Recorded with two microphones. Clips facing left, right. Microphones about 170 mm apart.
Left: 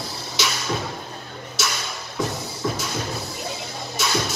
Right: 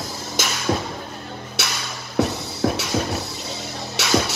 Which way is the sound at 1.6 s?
60° right (ahead or behind).